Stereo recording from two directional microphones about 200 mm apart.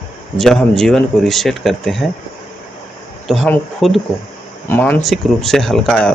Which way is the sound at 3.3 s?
Centre (ahead or behind).